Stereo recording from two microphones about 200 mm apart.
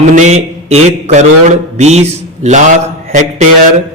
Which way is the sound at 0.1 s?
35° right (ahead or behind).